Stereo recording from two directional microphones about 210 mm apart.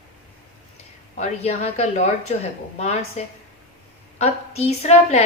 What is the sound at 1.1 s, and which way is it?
A woman's voice, 30° left (ahead or behind).